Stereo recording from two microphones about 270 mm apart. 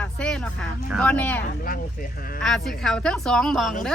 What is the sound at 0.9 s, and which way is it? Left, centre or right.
Speech, centre.